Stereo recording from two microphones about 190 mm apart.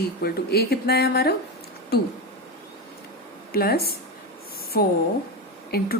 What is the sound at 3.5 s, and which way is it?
A woman's voice, 55° left (ahead or behind).